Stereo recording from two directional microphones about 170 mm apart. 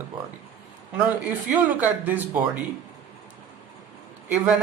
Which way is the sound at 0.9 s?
10° right (ahead or behind).